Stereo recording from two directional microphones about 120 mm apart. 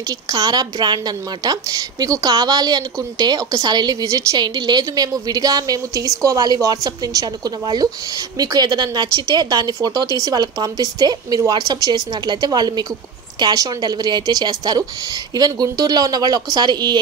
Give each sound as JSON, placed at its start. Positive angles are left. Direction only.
{"t": 0.3, "sound": "a woman's voice", "side_deg": -35}